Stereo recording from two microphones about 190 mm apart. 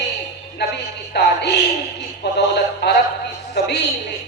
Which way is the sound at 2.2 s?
60° left (ahead or behind).